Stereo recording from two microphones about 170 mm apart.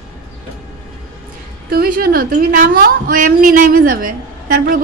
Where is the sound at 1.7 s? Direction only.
60° right (ahead or behind).